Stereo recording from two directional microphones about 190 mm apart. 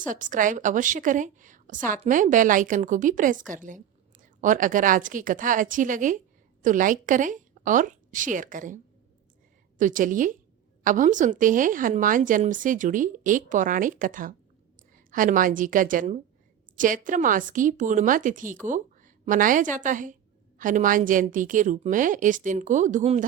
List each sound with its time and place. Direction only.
0.1 s a woman's voice: 45° right (ahead or behind)